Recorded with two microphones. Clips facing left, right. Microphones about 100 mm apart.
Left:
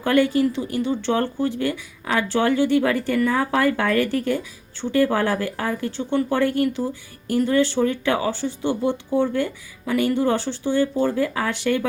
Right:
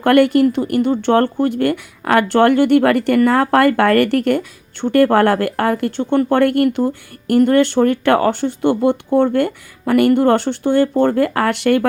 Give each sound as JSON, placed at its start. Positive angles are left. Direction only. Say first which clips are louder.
{"t": 0.0, "sound": "speech", "louder": "right 7 dB", "side_deg": -65}